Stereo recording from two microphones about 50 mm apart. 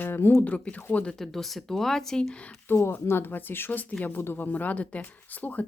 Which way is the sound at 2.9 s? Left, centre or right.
Left.